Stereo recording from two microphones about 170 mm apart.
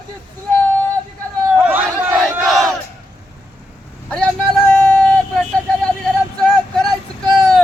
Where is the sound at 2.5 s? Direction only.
Centre (ahead or behind).